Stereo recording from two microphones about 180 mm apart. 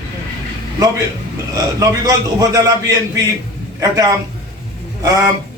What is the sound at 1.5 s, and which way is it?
A man's voice, 20° right (ahead or behind).